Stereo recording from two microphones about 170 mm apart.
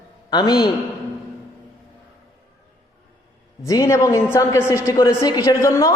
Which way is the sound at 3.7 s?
20° left (ahead or behind).